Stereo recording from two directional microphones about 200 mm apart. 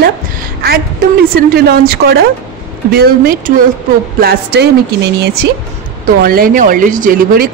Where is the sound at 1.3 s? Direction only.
50° right (ahead or behind).